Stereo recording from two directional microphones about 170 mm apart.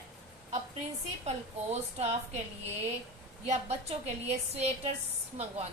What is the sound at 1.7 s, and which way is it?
Speech, 40° right (ahead or behind).